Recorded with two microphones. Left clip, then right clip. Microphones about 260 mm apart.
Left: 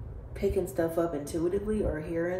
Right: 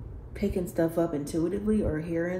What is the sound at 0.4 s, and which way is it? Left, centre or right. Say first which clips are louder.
Speech: even; right.